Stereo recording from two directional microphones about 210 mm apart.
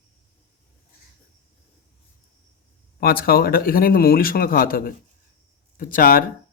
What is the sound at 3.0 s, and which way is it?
Speech, 45° left (ahead or behind).